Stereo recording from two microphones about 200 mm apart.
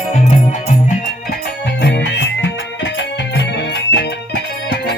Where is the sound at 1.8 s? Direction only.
60° left (ahead or behind).